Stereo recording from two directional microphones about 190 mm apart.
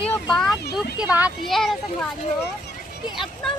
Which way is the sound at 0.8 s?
5° right (ahead or behind).